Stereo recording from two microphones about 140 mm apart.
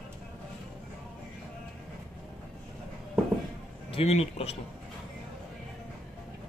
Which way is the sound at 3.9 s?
45° left (ahead or behind).